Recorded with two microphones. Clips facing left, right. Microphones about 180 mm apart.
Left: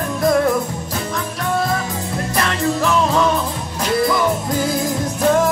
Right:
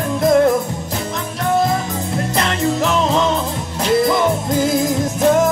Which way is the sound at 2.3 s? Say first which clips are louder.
Right 1 dB; 20° right (ahead or behind).